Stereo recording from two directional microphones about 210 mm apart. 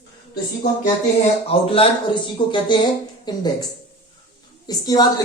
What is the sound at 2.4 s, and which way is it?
Speech, 20° left (ahead or behind).